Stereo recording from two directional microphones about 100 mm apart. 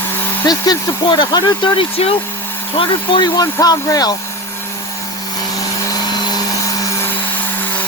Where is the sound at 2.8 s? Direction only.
55° left (ahead or behind).